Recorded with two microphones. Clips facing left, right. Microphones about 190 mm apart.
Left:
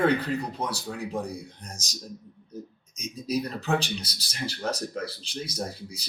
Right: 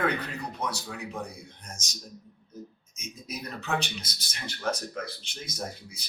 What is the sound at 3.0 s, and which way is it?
Speech, 35° left (ahead or behind).